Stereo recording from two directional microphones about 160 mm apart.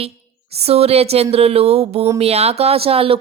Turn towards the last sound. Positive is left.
turn(degrees=-35)  # may be behind; listen again after turning